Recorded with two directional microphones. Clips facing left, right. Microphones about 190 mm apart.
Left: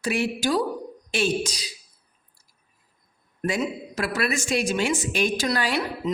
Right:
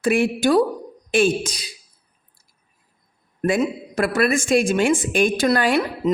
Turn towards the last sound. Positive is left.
turn(degrees=-50)  # may be behind; listen again after turning